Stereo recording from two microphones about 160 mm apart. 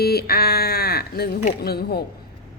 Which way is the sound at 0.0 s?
75° left (ahead or behind).